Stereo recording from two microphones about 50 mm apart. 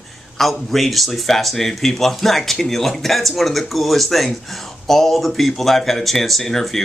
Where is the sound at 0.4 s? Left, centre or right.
Centre.